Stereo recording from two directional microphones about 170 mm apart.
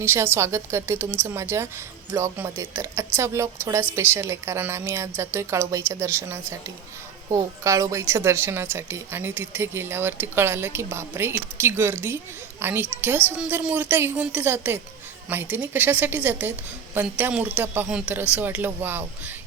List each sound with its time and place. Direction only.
0.0 s speech: 15° right (ahead or behind)
7.6 s speech: 20° right (ahead or behind)